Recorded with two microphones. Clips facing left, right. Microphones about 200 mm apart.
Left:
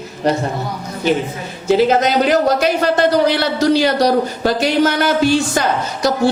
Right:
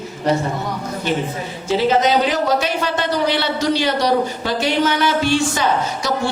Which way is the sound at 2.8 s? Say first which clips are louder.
Left 6 dB; 45° left (ahead or behind).